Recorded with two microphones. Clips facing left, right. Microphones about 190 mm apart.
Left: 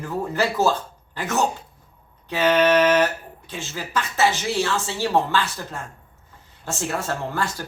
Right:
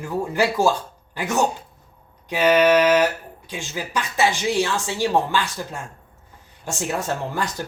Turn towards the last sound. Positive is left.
turn(degrees=-15)  # may be behind; listen again after turning